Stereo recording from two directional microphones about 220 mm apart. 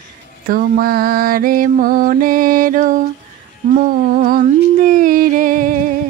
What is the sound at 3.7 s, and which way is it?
Humming, 40° right (ahead or behind).